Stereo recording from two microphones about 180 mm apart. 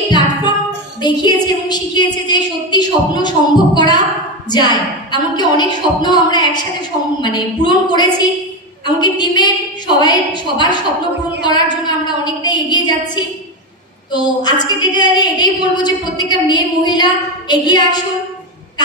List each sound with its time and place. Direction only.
1.0 s a woman's voice: 25° left (ahead or behind)